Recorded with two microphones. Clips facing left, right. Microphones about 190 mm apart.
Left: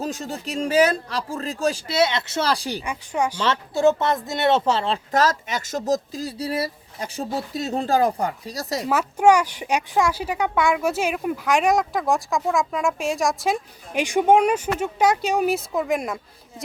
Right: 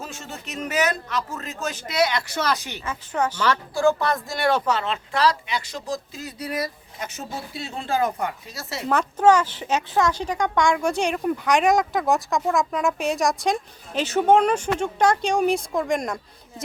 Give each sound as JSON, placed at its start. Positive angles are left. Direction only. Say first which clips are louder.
{"t": 0.0, "sound": "speech", "louder": "left 8 dB", "side_deg": 35}
{"t": 2.8, "sound": "speech", "louder": "right 2 dB", "side_deg": 10}
{"t": 3.4, "sound": "speech", "louder": "left 2 dB", "side_deg": 25}
{"t": 5.1, "sound": "speech", "louder": "even", "side_deg": 45}
{"t": 8.9, "sound": "speech", "louder": "even", "side_deg": 10}
{"t": 13.9, "sound": "speech", "louder": "left 1 dB", "side_deg": 15}